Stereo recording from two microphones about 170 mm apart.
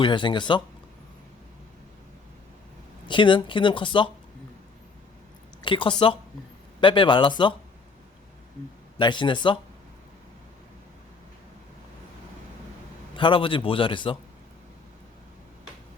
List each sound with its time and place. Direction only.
0.0 s speech: 30° left (ahead or behind)
3.1 s speech: 30° left (ahead or behind)
5.6 s speech: 30° left (ahead or behind)
9.0 s speech: 25° left (ahead or behind)
13.1 s a man's voice: 30° left (ahead or behind)